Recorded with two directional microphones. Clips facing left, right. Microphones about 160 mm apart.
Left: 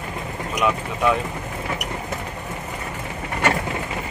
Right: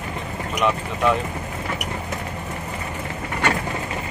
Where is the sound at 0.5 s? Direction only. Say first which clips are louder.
Even; centre (ahead or behind).